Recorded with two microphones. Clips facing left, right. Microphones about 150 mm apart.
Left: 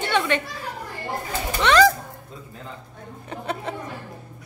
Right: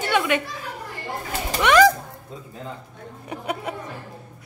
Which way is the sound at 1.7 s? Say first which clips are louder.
Right 1 dB; 15° right (ahead or behind).